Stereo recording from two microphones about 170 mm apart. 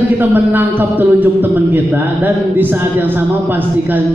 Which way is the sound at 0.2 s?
10° right (ahead or behind).